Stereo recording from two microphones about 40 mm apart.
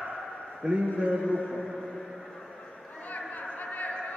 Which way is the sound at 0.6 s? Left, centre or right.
Centre.